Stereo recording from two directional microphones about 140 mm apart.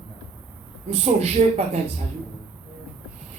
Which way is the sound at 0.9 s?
50° right (ahead or behind).